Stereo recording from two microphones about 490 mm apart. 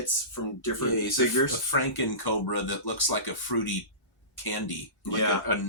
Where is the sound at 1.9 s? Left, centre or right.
Left.